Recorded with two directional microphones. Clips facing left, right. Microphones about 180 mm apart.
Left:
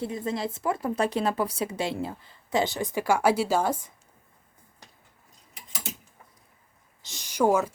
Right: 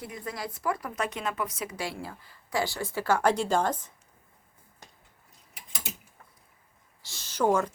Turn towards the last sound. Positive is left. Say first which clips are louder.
# left 2 dB
turn(degrees=10)  # may be behind; listen again after turning